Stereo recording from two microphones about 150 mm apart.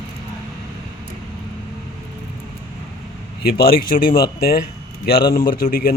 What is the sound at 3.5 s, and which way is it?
Speech, 85° left.